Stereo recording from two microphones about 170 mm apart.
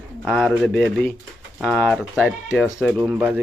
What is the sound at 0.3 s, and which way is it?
Speech, centre (ahead or behind).